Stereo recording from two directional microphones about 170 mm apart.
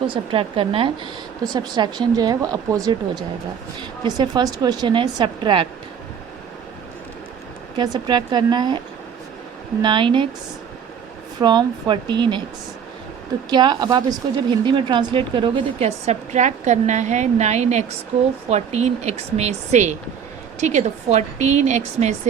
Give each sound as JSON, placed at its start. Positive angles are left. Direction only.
{"t": 0.1, "sound": "a woman's voice", "side_deg": -30}
{"t": 7.8, "sound": "speech", "side_deg": -25}
{"t": 9.8, "sound": "speech", "side_deg": -30}
{"t": 11.3, "sound": "speech", "side_deg": -25}
{"t": 13.5, "sound": "a woman's voice", "side_deg": -25}